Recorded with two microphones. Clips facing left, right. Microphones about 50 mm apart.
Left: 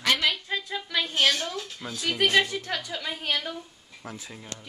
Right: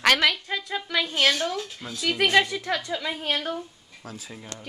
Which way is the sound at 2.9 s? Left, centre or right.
Right.